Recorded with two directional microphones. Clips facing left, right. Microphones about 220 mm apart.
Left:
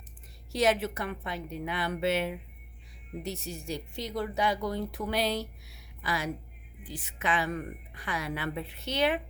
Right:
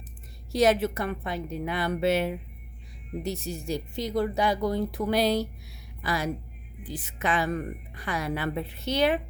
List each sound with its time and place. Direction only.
0.5 s a woman's voice: 40° right (ahead or behind)